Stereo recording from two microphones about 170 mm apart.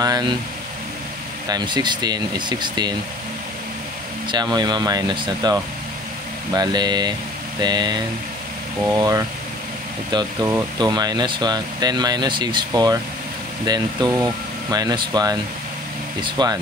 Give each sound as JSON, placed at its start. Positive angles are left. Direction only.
{"t": 0.0, "sound": "speech", "side_deg": -25}
{"t": 1.5, "sound": "speech", "side_deg": -25}
{"t": 4.3, "sound": "speech", "side_deg": -25}